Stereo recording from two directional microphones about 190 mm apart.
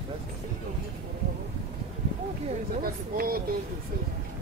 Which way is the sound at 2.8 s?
50° right (ahead or behind).